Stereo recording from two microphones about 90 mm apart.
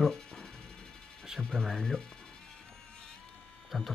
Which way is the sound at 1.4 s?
5° left (ahead or behind).